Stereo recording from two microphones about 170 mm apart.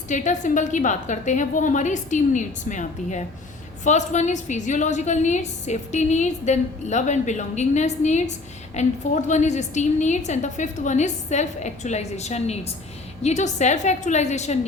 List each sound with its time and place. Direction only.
0.1 s a woman's voice: 45° left (ahead or behind)